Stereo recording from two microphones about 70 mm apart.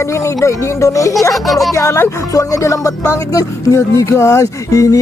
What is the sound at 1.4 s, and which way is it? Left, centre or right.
Speech, centre.